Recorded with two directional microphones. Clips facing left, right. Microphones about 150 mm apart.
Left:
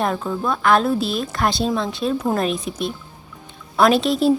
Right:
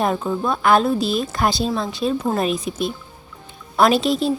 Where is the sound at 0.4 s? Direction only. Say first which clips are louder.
Even; 5° right (ahead or behind).